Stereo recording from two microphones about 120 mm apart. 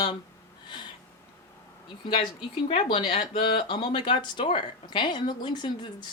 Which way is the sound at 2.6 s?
50° left (ahead or behind).